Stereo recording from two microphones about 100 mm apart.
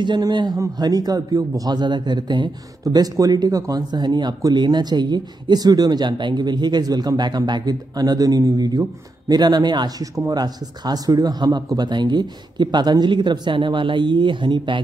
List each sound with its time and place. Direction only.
0.0 s speech: 50° right (ahead or behind)
2.8 s speech: 35° right (ahead or behind); by 14.8 s 55° right (ahead or behind)